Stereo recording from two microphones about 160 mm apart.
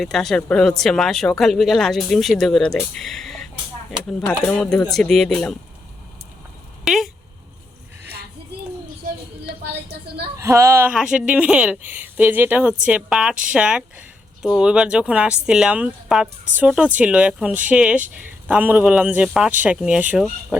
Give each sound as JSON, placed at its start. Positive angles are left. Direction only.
{"t": 0.0, "sound": "speech", "side_deg": 0}
{"t": 6.8, "sound": "a sound", "side_deg": 0}
{"t": 10.3, "sound": "a woman's voice", "side_deg": -20}